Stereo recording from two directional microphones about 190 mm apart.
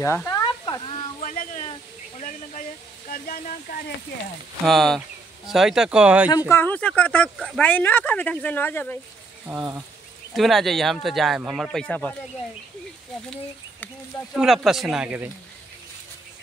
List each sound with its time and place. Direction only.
0.0 s speech: 15° left (ahead or behind)
0.7 s a sound: 25° left (ahead or behind)
1.2 s a sound: 45° left (ahead or behind)
4.6 s speech: centre (ahead or behind)
6.5 s speech: 10° left (ahead or behind)
9.5 s speech: 10° right (ahead or behind)
10.3 s speech: centre (ahead or behind)
13.3 s speech: 10° left (ahead or behind)
14.3 s speech: centre (ahead or behind)